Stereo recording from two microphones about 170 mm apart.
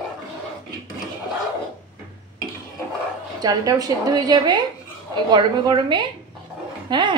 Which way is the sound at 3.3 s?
20° right (ahead or behind).